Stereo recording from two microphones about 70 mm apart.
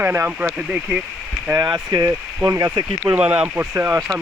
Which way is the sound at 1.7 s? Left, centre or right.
Right.